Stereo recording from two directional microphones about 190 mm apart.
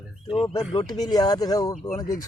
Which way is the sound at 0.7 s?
20° left (ahead or behind).